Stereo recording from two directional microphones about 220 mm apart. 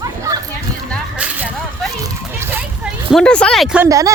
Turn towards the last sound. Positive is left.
turn(degrees=-15)  # may be behind; listen again after turning